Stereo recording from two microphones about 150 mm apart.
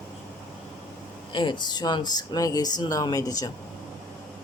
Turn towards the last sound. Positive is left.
turn(degrees=25)  # may be behind; listen again after turning